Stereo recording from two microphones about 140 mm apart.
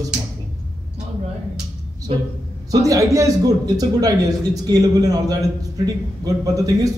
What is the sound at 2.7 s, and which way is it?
A man's voice, 25° right (ahead or behind).